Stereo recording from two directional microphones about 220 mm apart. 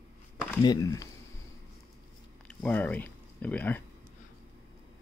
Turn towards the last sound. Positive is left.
turn(degrees=10)  # may be behind; listen again after turning